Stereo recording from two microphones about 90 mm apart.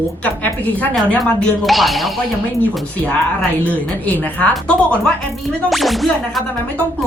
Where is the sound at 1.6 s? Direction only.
Centre (ahead or behind).